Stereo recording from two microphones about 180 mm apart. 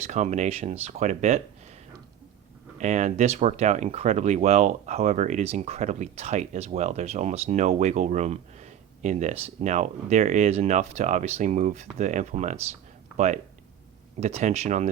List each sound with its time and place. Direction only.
0.1 s speech: 40° right (ahead or behind)
2.7 s speech: 40° right (ahead or behind)